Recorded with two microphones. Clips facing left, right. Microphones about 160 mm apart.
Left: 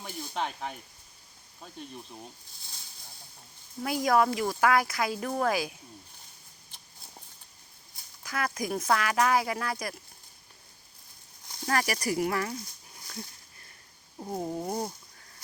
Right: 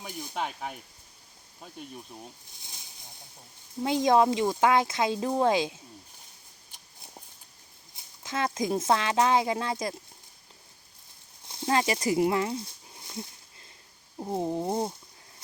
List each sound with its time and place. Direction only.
0.0 s speech: 10° right (ahead or behind)
2.1 s speech: centre (ahead or behind)
2.6 s a sound: 20° right (ahead or behind)
3.8 s speech: 25° right (ahead or behind)
7.9 s speech: 25° right (ahead or behind)
11.4 s a sound: 25° right (ahead or behind)
14.2 s speech: 20° right (ahead or behind)